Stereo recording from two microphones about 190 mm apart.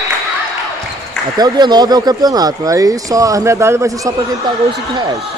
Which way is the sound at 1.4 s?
20° right (ahead or behind).